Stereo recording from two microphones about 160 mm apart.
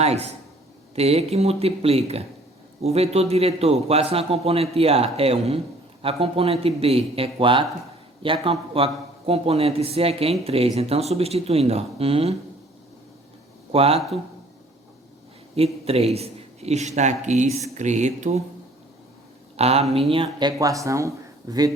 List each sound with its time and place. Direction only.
0.0 s a man's voice: 40° right (ahead or behind)
13.7 s a man's voice: 40° right (ahead or behind)
15.5 s a man's voice: 40° right (ahead or behind)
19.5 s a man's voice: 40° right (ahead or behind)
20.6 s speech: 20° right (ahead or behind)